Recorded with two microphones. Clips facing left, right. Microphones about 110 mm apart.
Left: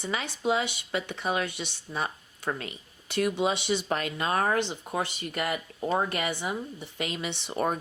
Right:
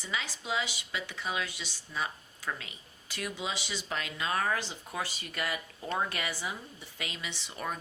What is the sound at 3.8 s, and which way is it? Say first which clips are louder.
Speech: left 6 dB; 50° left (ahead or behind).